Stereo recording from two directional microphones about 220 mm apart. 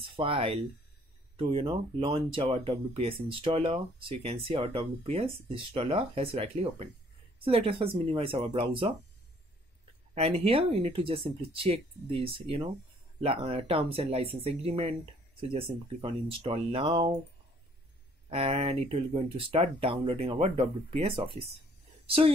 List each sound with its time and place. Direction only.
0.0 s speech: 25° right (ahead or behind)
10.1 s speech: 30° right (ahead or behind)
18.3 s speech: 25° right (ahead or behind)